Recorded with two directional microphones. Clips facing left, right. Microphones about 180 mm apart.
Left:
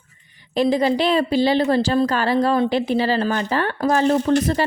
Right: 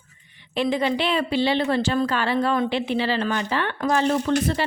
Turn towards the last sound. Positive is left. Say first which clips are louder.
# left 4 dB
turn(degrees=40)  # may be behind; listen again after turning